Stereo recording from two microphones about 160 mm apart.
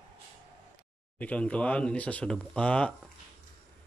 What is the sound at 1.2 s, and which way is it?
Speech, 10° left (ahead or behind).